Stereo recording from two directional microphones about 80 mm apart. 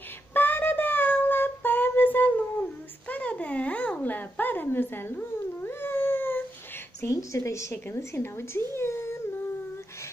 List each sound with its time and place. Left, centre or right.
0.3 s a sound: left
3.1 s babbling: centre
7.0 s speech: left